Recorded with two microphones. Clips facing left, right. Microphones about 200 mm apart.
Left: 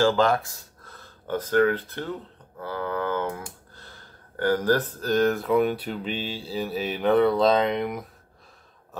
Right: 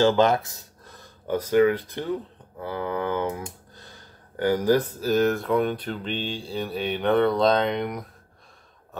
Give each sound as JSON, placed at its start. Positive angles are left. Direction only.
{"t": 0.0, "sound": "speech", "side_deg": -20}